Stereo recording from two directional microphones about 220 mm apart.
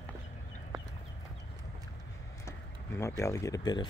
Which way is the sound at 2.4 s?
10° left (ahead or behind).